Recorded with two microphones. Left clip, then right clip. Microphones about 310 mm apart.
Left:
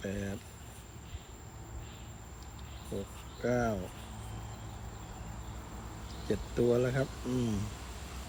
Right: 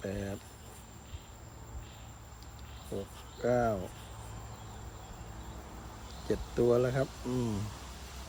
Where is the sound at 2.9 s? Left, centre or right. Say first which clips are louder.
Right 1 dB; right.